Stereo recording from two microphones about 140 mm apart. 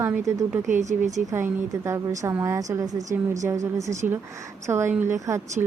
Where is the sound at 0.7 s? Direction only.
55° right (ahead or behind).